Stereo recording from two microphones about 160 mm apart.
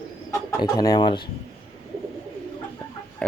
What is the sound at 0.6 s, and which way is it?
Speech, 25° left (ahead or behind).